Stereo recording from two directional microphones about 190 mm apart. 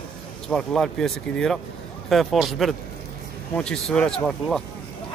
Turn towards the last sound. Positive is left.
turn(degrees=0)  # may be behind; listen again after turning